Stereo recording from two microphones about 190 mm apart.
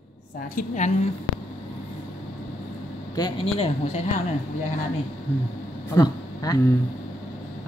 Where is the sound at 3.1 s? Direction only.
25° left (ahead or behind).